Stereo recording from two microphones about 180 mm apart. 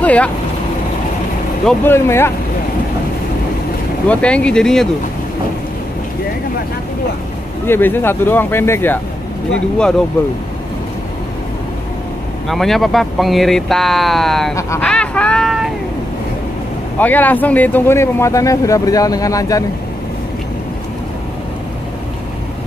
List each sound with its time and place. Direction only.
0.0 s speech: 5° left (ahead or behind)
1.7 s speech: 10° left (ahead or behind)
4.1 s speech: 5° left (ahead or behind)
7.6 s speech: 10° left (ahead or behind)
12.4 s speech: centre (ahead or behind)
14.5 s speech: 15° left (ahead or behind)
14.9 s speech: 5° left (ahead or behind)
17.0 s speech: 10° left (ahead or behind)